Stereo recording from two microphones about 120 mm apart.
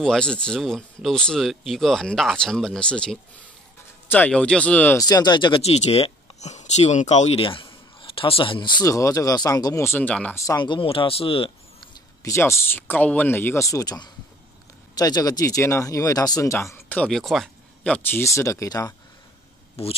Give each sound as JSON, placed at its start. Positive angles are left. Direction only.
{"t": 0.0, "sound": "speech", "side_deg": 5}
{"t": 4.9, "sound": "speech", "side_deg": 30}
{"t": 5.6, "sound": "speech", "side_deg": 60}
{"t": 7.4, "sound": "speech", "side_deg": 45}
{"t": 9.8, "sound": "speech", "side_deg": 15}
{"t": 10.3, "sound": "speech", "side_deg": 25}
{"t": 10.6, "sound": "speech", "side_deg": 45}
{"t": 12.2, "sound": "speech", "side_deg": 25}
{"t": 16.9, "sound": "speech", "side_deg": 5}
{"t": 18.2, "sound": "speech", "side_deg": 25}
{"t": 19.8, "sound": "speech", "side_deg": 55}